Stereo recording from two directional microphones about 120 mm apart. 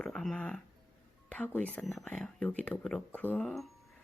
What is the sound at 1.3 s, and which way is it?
Speech, 10° left (ahead or behind).